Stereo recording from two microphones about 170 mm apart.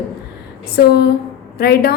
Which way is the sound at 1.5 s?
60° left (ahead or behind).